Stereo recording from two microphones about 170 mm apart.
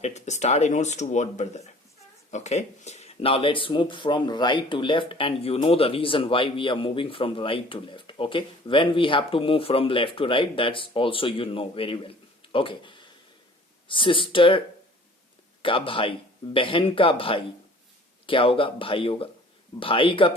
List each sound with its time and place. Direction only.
0.0 s speech: 40° left (ahead or behind)
15.6 s speech: 30° left (ahead or behind)